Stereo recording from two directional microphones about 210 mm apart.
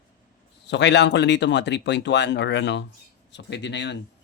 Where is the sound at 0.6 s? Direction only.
55° left (ahead or behind).